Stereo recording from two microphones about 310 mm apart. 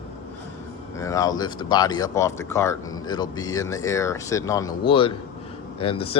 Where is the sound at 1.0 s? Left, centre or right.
Centre.